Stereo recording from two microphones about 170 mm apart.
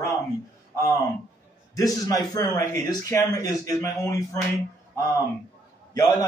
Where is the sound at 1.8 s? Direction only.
20° left (ahead or behind).